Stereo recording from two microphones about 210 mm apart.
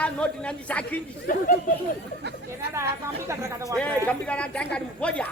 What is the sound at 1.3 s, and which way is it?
Speech, 40° left (ahead or behind).